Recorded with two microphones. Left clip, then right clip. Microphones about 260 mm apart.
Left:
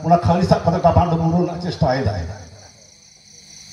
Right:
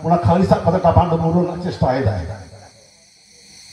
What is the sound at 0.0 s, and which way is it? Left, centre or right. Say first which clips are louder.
A man's voice: even; left.